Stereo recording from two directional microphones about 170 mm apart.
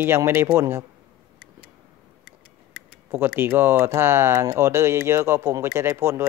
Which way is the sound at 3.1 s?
15° right (ahead or behind).